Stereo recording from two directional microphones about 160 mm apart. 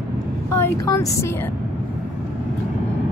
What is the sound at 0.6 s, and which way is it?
Speech, 20° left (ahead or behind).